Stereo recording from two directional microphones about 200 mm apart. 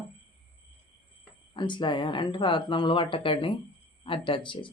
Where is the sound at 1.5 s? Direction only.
25° left (ahead or behind).